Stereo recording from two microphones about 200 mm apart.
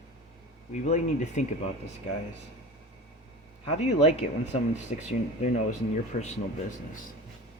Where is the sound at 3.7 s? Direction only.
30° left (ahead or behind).